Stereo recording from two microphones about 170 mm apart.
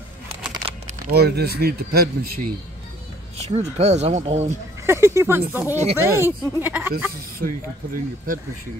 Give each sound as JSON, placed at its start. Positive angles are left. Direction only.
{"t": 1.1, "sound": "speech", "side_deg": -70}
{"t": 3.3, "sound": "speech", "side_deg": -40}
{"t": 4.8, "sound": "speech", "side_deg": -15}
{"t": 7.3, "sound": "speech", "side_deg": -55}